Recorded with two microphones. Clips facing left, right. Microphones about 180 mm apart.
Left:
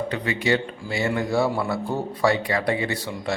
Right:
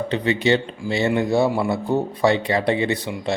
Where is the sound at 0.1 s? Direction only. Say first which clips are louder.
Right 6 dB; 25° right (ahead or behind).